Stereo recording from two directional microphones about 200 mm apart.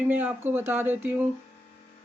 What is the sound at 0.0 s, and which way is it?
Speech, 10° right (ahead or behind).